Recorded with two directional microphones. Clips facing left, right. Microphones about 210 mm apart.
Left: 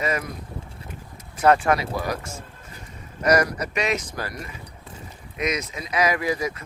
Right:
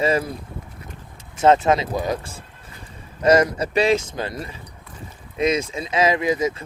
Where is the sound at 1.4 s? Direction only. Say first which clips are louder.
Right 3 dB; 20° right (ahead or behind).